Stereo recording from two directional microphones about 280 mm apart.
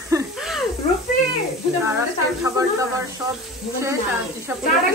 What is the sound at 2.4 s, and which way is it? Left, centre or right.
Speech, centre.